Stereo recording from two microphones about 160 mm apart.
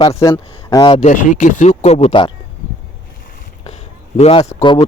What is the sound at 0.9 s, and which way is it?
Speech, 50° left (ahead or behind).